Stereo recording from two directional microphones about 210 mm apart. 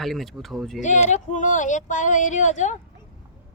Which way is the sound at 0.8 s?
35° left (ahead or behind).